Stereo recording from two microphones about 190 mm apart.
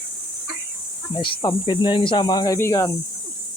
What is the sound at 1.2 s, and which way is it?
Speech, 25° left (ahead or behind).